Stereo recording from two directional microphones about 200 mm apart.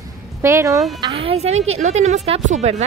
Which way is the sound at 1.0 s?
25° right (ahead or behind).